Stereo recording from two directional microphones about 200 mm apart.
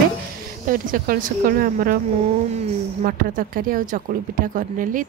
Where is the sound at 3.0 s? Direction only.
45° right (ahead or behind).